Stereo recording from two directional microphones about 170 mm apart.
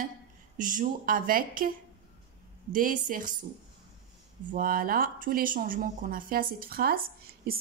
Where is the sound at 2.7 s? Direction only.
55° right (ahead or behind).